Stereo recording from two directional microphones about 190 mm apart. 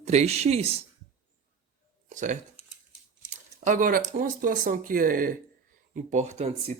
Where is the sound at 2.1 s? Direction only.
40° right (ahead or behind).